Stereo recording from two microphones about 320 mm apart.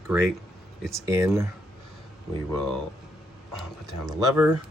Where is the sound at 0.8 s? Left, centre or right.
Centre.